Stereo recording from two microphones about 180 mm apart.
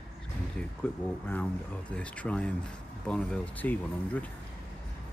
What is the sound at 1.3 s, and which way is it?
Speech, 10° left (ahead or behind).